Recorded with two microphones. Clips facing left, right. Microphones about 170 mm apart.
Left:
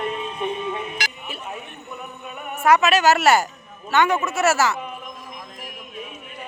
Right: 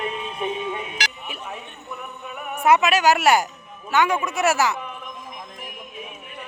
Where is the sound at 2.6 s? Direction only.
20° right (ahead or behind).